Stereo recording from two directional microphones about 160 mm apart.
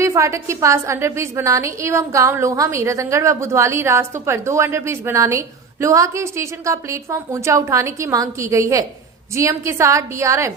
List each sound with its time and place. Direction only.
0.0 s a woman's voice: 20° right (ahead or behind)